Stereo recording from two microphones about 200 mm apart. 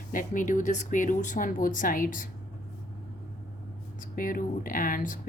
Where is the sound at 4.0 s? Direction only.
45° left (ahead or behind).